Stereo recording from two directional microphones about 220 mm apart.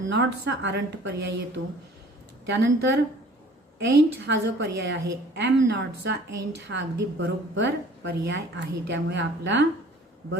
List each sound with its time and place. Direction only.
0.1 s a woman's voice: 50° right (ahead or behind)